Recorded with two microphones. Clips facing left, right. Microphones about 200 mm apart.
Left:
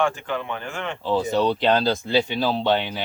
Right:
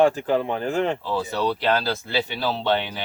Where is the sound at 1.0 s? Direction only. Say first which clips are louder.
Left 4 dB; 20° left (ahead or behind).